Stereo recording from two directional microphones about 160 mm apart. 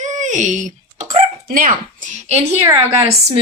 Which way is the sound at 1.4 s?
60° right (ahead or behind).